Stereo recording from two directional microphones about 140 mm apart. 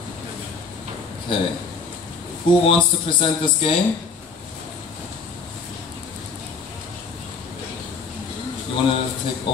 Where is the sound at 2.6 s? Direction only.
40° left (ahead or behind).